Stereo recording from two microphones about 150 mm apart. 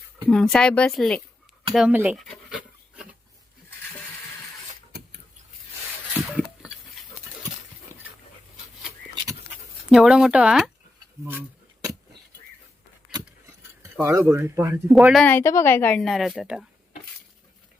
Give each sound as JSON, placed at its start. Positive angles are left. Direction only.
{"t": 0.3, "sound": "speech", "side_deg": 5}
{"t": 2.1, "sound": "dog", "side_deg": 0}
{"t": 4.9, "sound": "a sound", "side_deg": -90}
{"t": 9.9, "sound": "speech", "side_deg": -5}
{"t": 13.1, "sound": "a sound", "side_deg": -5}
{"t": 13.9, "sound": "speech", "side_deg": -20}
{"t": 14.8, "sound": "speech", "side_deg": -5}
{"t": 15.3, "sound": "a woman's voice", "side_deg": 15}